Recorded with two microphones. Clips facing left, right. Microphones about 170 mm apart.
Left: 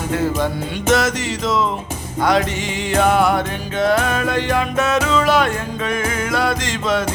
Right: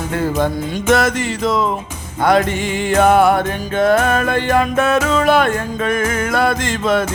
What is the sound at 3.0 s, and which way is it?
Music, 50° right (ahead or behind).